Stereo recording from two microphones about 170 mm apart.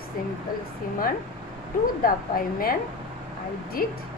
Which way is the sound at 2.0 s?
55° left (ahead or behind).